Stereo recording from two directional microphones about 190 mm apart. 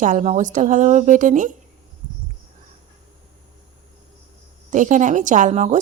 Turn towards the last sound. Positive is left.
turn(degrees=-35)  # may be behind; listen again after turning